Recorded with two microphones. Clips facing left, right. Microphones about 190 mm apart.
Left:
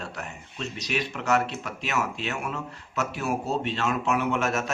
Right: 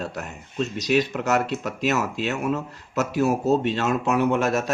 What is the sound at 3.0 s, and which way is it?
A man's voice, 40° right (ahead or behind).